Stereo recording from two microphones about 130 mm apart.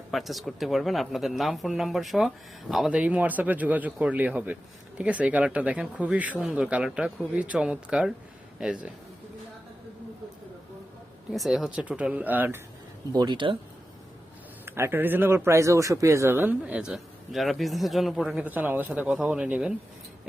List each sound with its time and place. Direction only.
0.1 s speech: centre (ahead or behind)
11.3 s speech: centre (ahead or behind)
13.1 s speech: 35° right (ahead or behind)
14.6 s speech: 15° right (ahead or behind)